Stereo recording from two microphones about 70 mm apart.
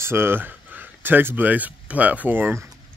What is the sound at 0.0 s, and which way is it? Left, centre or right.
Speech, right.